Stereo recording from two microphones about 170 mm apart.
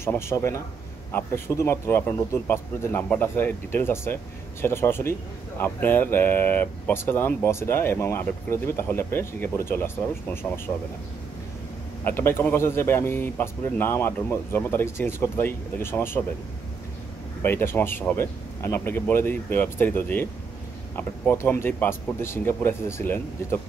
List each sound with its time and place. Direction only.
0.0 s speech: 15° left (ahead or behind)
12.0 s speech: 15° left (ahead or behind)
17.4 s speech: 15° left (ahead or behind)